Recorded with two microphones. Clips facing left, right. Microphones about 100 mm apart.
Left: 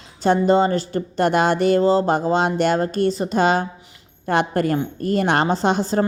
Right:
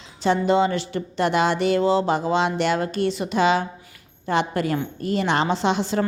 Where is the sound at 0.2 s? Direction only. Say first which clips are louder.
Left 3 dB; 45° left (ahead or behind).